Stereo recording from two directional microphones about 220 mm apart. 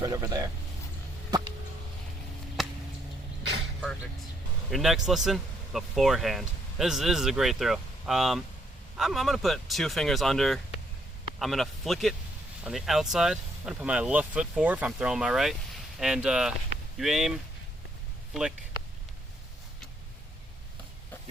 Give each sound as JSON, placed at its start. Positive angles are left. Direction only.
{"t": 0.0, "sound": "speech", "side_deg": -15}
{"t": 2.6, "sound": "a sound", "side_deg": 0}
{"t": 4.7, "sound": "speech", "side_deg": 0}